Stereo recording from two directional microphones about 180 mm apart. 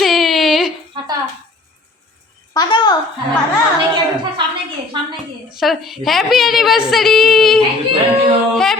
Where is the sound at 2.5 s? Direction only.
25° left (ahead or behind).